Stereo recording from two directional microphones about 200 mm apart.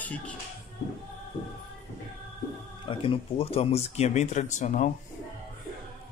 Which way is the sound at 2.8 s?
25° left (ahead or behind).